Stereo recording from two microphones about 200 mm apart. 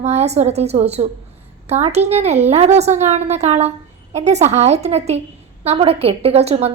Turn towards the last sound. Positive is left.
turn(degrees=-30)  # may be behind; listen again after turning